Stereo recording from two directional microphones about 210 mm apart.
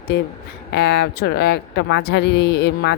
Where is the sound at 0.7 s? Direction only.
55° left (ahead or behind).